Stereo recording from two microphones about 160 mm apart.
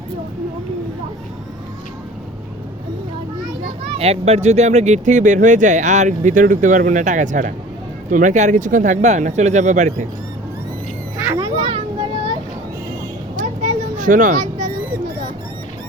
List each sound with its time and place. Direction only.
3.9 s speech: 40° right (ahead or behind)
11.3 s a sound: 25° right (ahead or behind)
13.3 s vehicle: 55° right (ahead or behind)